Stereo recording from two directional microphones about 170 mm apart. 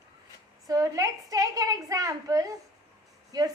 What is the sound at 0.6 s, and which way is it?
A woman's voice, 20° right (ahead or behind).